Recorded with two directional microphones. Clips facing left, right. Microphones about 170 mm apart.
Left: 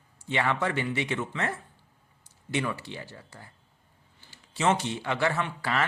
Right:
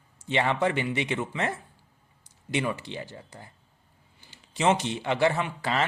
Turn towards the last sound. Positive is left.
turn(degrees=-20)  # may be behind; listen again after turning